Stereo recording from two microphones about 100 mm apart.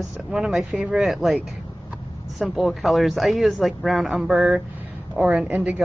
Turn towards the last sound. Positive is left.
turn(degrees=-15)  # may be behind; listen again after turning